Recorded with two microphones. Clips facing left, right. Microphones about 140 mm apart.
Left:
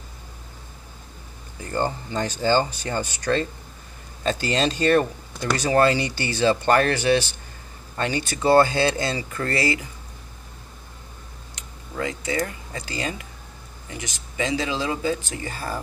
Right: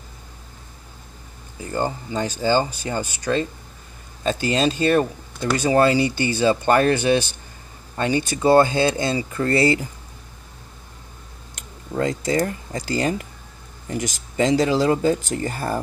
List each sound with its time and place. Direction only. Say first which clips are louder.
1.6 s speech: right 1 dB; 15° right (ahead or behind); by 9.8 s 30° right (ahead or behind)
11.9 s speech: right 6 dB; 40° right (ahead or behind)